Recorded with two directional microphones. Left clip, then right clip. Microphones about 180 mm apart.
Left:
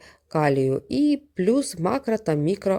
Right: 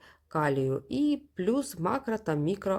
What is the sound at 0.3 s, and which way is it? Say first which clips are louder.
Speech: left 7 dB; 30° left (ahead or behind).